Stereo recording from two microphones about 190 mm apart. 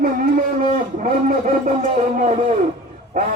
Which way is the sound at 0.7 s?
45° right (ahead or behind).